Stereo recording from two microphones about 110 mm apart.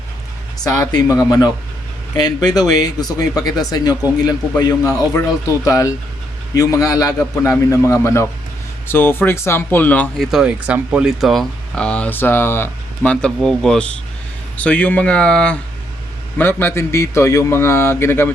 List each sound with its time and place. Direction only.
0.6 s a man's voice: 35° left (ahead or behind); by 10.1 s 15° left (ahead or behind)
10.4 s speech: 10° right (ahead or behind); by 15.5 s 10° left (ahead or behind)
16.4 s a man's voice: 20° left (ahead or behind)